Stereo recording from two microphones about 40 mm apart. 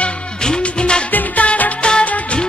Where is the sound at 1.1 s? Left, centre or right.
Left.